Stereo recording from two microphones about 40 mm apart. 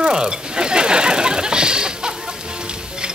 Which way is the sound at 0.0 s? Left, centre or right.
Centre.